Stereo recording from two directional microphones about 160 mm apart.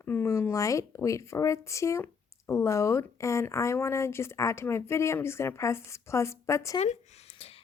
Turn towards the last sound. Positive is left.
turn(degrees=40)  # may be behind; listen again after turning